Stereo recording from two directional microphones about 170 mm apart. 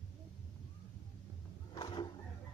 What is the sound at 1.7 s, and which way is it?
Roar, 25° left (ahead or behind).